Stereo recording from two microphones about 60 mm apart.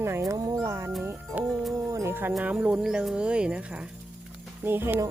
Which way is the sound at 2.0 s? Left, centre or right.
Right.